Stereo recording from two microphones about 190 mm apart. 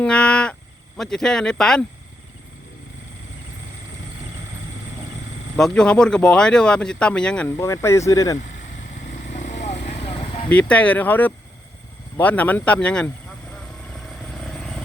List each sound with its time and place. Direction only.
0.0 s a sound: 5° left (ahead or behind)
0.9 s speech: 5° left (ahead or behind)
5.5 s speech: 5° left (ahead or behind)
9.0 s vehicle: 40° left (ahead or behind)
10.5 s speech: 5° left (ahead or behind)
13.5 s vehicle: centre (ahead or behind)